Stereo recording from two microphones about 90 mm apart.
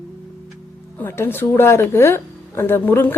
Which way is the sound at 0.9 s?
25° left (ahead or behind).